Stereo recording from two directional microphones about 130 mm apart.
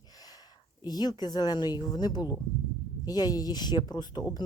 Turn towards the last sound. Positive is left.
turn(degrees=35)  # may be behind; listen again after turning